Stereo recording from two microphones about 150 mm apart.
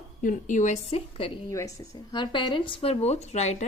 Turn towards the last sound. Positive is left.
turn(degrees=50)  # may be behind; listen again after turning